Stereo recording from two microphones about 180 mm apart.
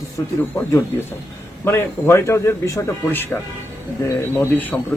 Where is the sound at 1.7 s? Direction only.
15° left (ahead or behind).